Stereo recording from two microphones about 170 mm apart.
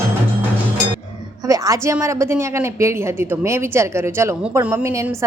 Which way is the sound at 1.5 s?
20° right (ahead or behind).